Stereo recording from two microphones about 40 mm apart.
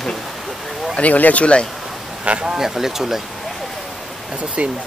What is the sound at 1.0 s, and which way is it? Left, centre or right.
Speech, left.